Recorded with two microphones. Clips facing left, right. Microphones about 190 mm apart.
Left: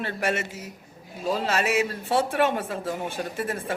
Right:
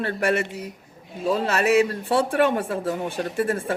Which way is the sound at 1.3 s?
60° right (ahead or behind).